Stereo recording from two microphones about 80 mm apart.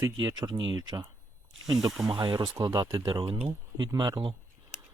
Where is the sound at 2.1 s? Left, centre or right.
Right.